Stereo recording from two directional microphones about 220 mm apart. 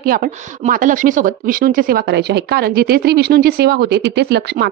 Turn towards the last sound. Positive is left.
turn(degrees=-45)  # may be behind; listen again after turning